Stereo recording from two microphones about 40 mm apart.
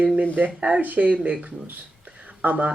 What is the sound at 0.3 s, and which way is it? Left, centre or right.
Speech, right.